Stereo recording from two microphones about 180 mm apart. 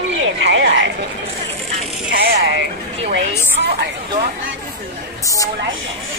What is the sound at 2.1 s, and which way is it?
Speech, 70° right (ahead or behind).